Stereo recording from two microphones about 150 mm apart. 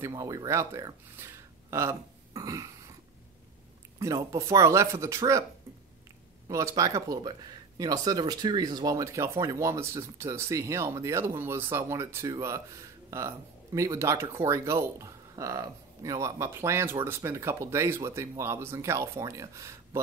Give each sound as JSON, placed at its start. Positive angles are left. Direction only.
{"t": 0.1, "sound": "speech", "side_deg": -25}
{"t": 4.0, "sound": "speech", "side_deg": -20}
{"t": 6.5, "sound": "speech", "side_deg": -20}